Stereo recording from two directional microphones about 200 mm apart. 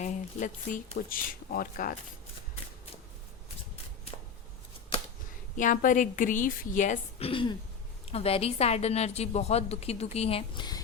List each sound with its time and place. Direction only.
0.0 s speech: 40° left (ahead or behind)
4.1 s shuffling cards: 30° left (ahead or behind)
5.5 s a woman's voice: 40° left (ahead or behind); by 10.8 s 25° left (ahead or behind)